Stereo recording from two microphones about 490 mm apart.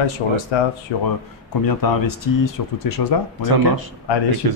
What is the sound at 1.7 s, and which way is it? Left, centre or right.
Speech, left.